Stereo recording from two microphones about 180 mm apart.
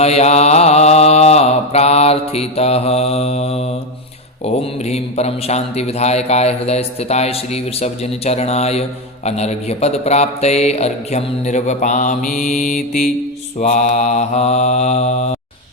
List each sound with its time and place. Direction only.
0.0 s mantra: 35° left (ahead or behind)
4.4 s a man's voice: 35° left (ahead or behind)